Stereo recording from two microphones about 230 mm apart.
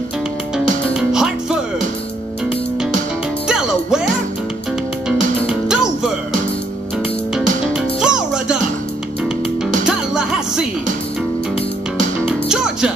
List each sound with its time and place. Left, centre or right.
0.9 s music: centre
3.4 s music: centre
5.1 s music: centre
7.3 s music: centre
9.8 s music: centre
12.3 s music: centre